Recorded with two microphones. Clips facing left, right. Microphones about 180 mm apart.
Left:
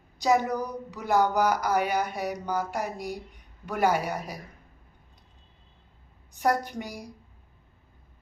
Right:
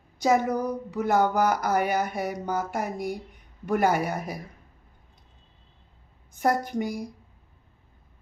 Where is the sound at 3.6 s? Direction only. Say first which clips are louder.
Right 2 dB; 55° right (ahead or behind).